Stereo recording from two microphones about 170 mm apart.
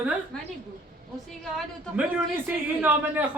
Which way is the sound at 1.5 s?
10° right (ahead or behind).